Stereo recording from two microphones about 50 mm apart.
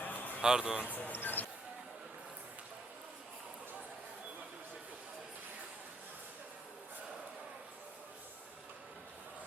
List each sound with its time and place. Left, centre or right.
0.0 s a sound: left
0.4 s a man's voice: centre
0.8 s speech: left